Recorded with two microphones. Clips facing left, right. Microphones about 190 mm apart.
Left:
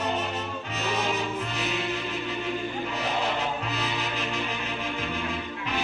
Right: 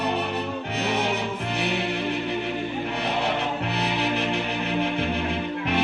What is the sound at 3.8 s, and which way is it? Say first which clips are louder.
Music: right 6 dB; 60° right (ahead or behind).